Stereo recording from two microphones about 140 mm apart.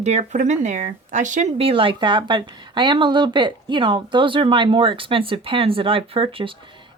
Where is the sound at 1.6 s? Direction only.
40° right (ahead or behind).